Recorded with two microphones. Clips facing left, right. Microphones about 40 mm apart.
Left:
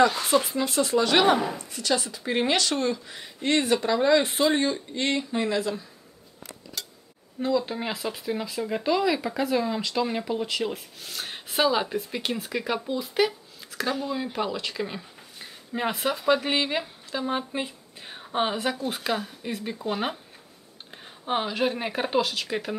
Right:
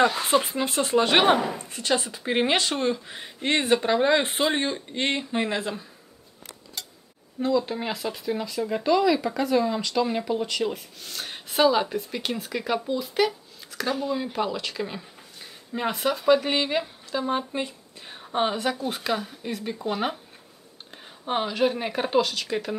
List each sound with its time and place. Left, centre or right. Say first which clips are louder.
0.0 s speech: even; right
7.3 s speech: right 1 dB; centre